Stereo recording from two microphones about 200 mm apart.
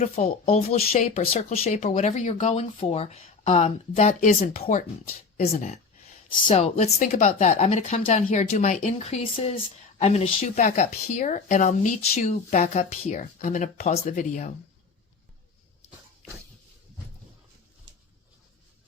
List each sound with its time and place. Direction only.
0.0 s speech: 35° left (ahead or behind)